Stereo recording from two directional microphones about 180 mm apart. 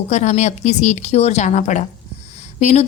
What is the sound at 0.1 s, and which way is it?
A woman's voice, 40° left (ahead or behind).